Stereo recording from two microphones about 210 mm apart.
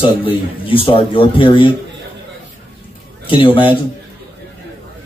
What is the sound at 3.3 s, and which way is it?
Speech, 25° left (ahead or behind).